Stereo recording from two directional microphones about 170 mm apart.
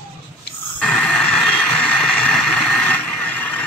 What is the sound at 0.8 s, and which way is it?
Vehicle, 5° left (ahead or behind).